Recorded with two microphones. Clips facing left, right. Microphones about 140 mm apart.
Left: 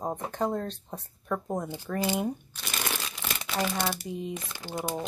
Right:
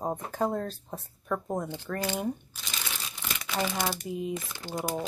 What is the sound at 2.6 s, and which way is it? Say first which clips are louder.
Crumpling: left 5 dB; 60° left (ahead or behind).